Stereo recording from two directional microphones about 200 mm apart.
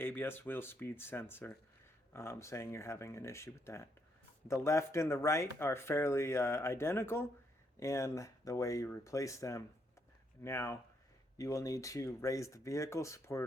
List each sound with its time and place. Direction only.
0.0 s speech: 10° left (ahead or behind)